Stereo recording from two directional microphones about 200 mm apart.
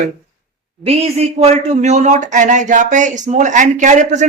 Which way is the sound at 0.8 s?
30° right (ahead or behind).